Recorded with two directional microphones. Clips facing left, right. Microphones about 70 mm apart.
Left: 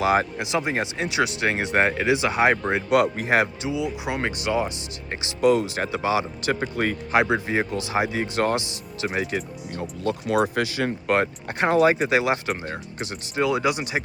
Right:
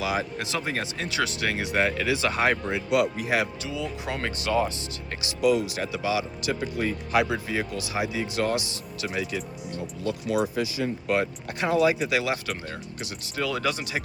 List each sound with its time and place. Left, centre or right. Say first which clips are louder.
0.0 s speech: left 7 dB; left
0.3 s speech: left 5 dB; centre
2.6 s speech: left 4 dB; left
3.7 s speech: left 5 dB; centre
5.2 s speech: left 3 dB; left
7.1 s speech: left 4 dB; left
9.0 s speech: left 4 dB; left
11.4 s speech: left 4 dB; left; by 13.9 s centre